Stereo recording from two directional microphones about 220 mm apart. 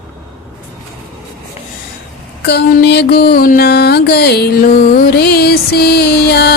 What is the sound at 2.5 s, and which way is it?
Music, 50° left (ahead or behind).